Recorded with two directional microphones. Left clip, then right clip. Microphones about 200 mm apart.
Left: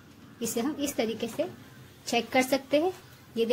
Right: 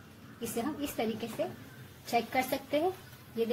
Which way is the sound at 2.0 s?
50° left (ahead or behind).